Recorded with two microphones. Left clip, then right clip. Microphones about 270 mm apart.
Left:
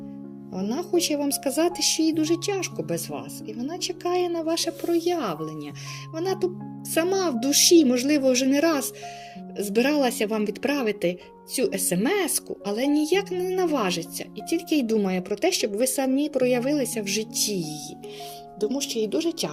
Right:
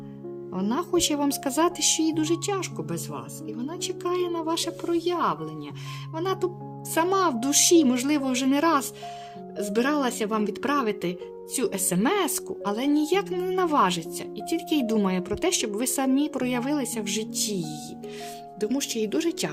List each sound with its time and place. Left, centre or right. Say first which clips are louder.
0.6 s speech: even; centre
4.1 s speech: left 3 dB; centre
18.7 s speech: even; right